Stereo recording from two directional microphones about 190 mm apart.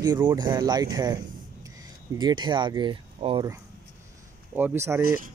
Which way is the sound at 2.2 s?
25° right (ahead or behind).